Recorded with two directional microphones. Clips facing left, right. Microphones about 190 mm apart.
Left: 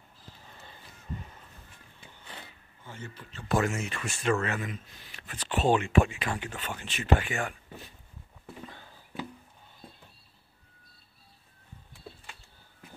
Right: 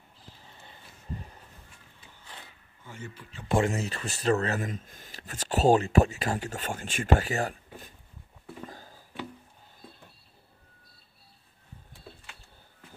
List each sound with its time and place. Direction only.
1.1 s goat: 35° right (ahead or behind)
3.0 s speech: 10° right (ahead or behind)
3.4 s speech: 30° right (ahead or behind)
8.6 s music: 40° right (ahead or behind)